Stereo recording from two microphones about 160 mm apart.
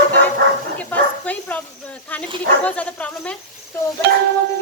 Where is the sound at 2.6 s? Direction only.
10° left (ahead or behind).